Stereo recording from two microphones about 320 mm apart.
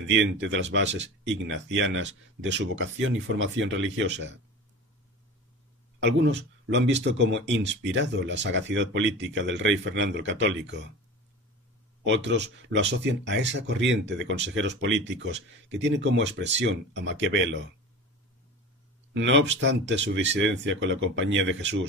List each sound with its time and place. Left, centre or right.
0.1 s speech: right
6.0 s speech: right
12.0 s speech: right
19.1 s speech: right